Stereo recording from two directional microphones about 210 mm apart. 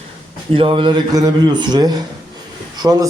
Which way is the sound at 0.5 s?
25° right (ahead or behind).